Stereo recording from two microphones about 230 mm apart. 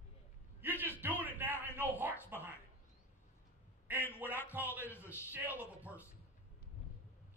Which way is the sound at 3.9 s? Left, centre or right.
Centre.